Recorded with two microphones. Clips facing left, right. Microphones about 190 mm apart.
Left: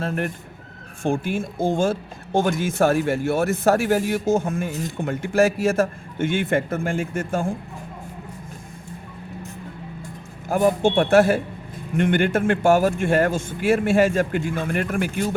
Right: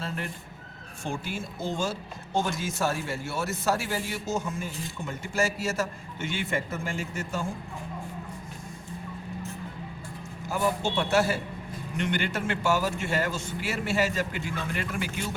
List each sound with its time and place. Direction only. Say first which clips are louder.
0.0 s speech: left 9 dB; 55° left (ahead or behind)
10.5 s speech: left 9 dB; 50° left (ahead or behind)